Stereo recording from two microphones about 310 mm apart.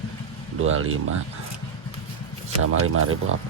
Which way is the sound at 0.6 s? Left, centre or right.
Right.